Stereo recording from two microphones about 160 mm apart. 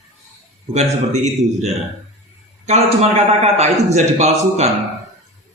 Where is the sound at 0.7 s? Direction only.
45° right (ahead or behind).